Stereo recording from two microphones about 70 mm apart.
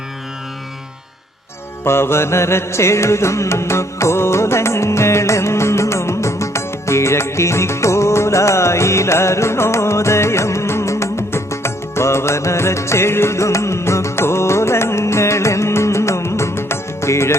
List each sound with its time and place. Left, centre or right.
1.8 s music: left